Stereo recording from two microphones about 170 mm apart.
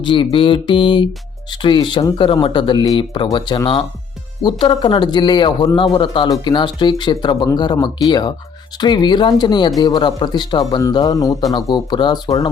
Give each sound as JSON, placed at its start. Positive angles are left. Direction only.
{"t": 0.0, "sound": "speech", "side_deg": 30}